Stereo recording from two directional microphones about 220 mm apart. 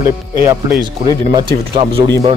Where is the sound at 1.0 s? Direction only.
20° right (ahead or behind).